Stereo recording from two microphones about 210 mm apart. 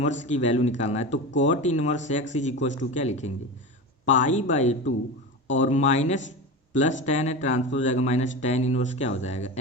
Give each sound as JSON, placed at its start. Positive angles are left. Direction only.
{"t": 0.0, "sound": "speech", "side_deg": 35}